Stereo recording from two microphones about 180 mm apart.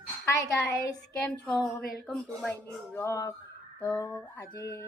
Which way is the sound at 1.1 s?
5° left (ahead or behind).